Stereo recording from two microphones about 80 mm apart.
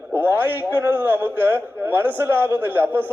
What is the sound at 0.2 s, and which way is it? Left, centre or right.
A man's voice, right.